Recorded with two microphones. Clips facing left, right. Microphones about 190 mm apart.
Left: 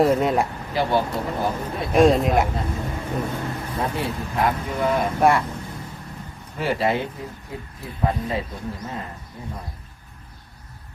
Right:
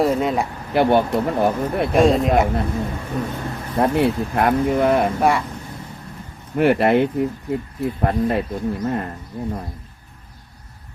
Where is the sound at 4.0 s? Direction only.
60° right (ahead or behind).